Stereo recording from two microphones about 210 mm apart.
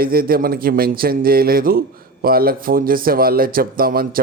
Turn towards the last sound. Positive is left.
turn(degrees=-45)  # may be behind; listen again after turning